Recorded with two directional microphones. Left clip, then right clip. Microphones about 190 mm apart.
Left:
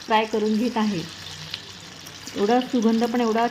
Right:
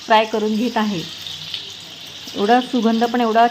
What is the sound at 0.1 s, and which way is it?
Speech, 15° right (ahead or behind).